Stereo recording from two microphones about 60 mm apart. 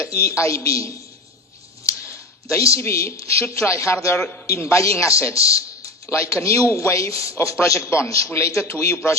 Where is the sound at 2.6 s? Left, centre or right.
Left.